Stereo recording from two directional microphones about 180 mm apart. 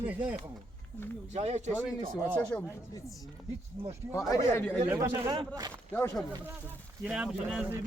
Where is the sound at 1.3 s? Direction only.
40° right (ahead or behind).